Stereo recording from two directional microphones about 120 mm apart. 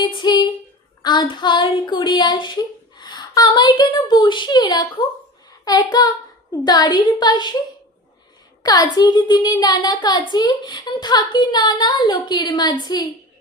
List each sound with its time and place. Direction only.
0.0 s a woman's voice: 40° left (ahead or behind)
5.5 s child singing: 35° left (ahead or behind)
6.7 s a woman's voice: 35° left (ahead or behind)
8.6 s a woman's voice: 35° left (ahead or behind)